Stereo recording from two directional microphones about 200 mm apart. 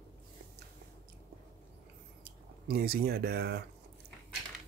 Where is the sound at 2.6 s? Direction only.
50° right (ahead or behind).